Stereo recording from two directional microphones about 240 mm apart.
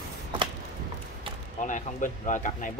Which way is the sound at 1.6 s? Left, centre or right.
Left.